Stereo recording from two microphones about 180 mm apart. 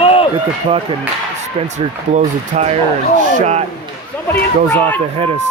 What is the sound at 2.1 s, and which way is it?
Speech, 40° right (ahead or behind).